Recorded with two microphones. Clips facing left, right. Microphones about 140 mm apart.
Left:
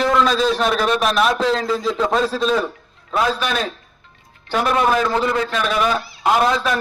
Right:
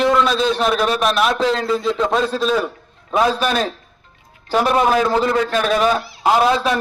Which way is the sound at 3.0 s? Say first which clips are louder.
Right 3 dB; 20° right (ahead or behind).